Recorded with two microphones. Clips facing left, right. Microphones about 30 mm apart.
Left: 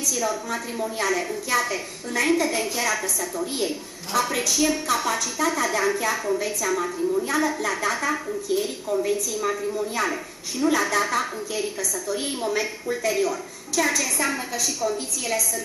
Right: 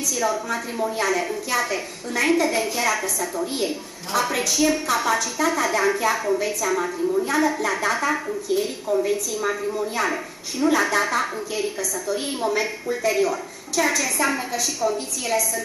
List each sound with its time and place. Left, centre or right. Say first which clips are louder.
0.1 s a woman's voice: right 4 dB; centre